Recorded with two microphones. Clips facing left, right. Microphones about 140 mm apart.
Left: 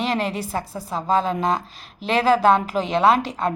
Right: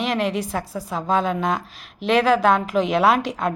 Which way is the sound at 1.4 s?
30° left (ahead or behind).